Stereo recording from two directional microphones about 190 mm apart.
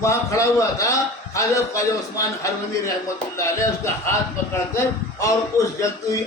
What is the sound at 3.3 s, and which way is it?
Speech, 15° left (ahead or behind).